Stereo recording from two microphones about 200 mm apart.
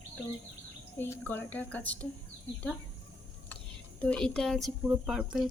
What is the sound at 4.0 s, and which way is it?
Speech, 5° left (ahead or behind).